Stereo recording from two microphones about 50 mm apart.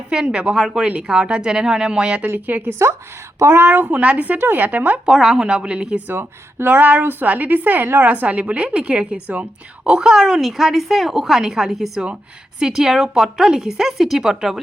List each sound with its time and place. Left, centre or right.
0.1 s a woman's voice: centre
0.9 s speech: right
2.2 s a woman's voice: right
2.6 s a woman's voice: right
3.5 s a woman's voice: right
4.4 s a woman's voice: right
5.0 s a woman's voice: centre
5.4 s speech: centre
6.1 s a woman's voice: right; by 9.2 s centre
9.2 s a woman's voice: right
9.8 s a woman's voice: centre